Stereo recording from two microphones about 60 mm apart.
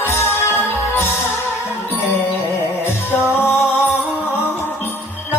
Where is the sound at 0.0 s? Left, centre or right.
Left.